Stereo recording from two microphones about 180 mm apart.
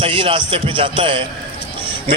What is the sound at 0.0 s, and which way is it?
A man's voice, 30° right (ahead or behind).